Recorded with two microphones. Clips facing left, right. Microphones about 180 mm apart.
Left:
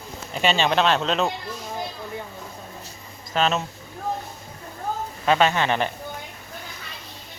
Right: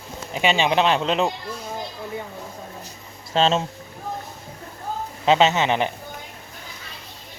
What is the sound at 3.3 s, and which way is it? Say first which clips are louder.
Speech: right 3 dB; 30° right (ahead or behind).